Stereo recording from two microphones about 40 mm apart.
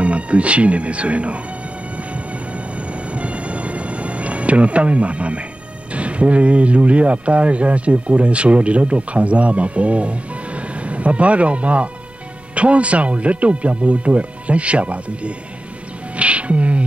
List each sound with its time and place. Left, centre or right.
0.0 s speech: right
2.0 s train: right
5.9 s speech: right
16.2 s music: right